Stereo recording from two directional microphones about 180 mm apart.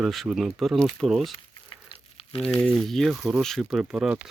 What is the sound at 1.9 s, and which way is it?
Crumpling, 30° left (ahead or behind).